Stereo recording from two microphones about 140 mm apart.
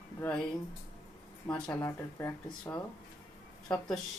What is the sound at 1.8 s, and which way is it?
Speech, 20° left (ahead or behind).